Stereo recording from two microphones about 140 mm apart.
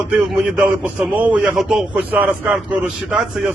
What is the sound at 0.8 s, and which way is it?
A man's voice, 10° right (ahead or behind).